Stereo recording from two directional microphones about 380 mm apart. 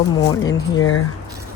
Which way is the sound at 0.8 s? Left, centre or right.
Left.